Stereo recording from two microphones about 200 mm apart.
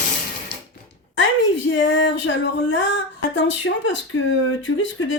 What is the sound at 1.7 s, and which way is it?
Speech, 65° left (ahead or behind).